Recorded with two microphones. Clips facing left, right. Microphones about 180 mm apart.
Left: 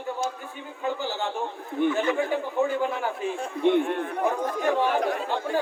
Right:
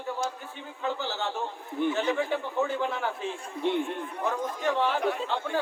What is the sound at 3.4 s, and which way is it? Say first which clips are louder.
A man's voice: left 7 dB; 60° left (ahead or behind).